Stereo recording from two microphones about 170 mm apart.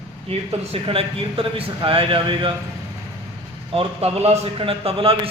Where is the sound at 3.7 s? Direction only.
35° right (ahead or behind).